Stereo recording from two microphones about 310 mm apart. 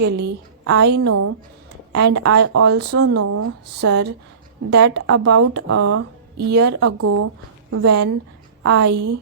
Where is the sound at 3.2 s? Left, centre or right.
Right.